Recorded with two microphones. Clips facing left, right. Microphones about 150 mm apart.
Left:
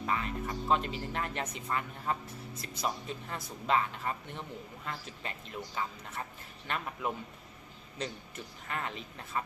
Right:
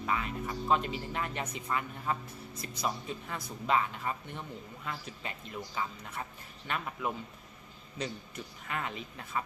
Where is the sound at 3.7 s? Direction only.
5° right (ahead or behind).